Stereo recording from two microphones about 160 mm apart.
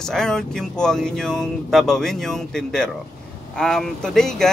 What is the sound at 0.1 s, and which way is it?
Speech, 5° left (ahead or behind).